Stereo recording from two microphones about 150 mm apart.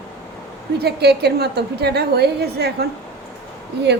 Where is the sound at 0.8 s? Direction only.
90° right.